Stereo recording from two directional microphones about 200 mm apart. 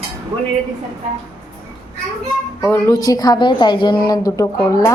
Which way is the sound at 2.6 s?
10° left (ahead or behind).